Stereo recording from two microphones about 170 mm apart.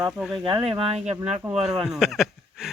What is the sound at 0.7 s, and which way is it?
Speech, 35° right (ahead or behind).